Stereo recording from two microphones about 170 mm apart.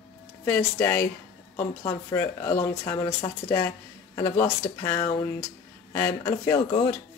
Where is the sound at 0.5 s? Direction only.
10° left (ahead or behind).